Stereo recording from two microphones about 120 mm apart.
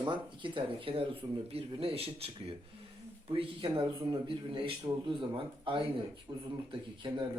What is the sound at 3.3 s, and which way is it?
Speech, 40° right (ahead or behind).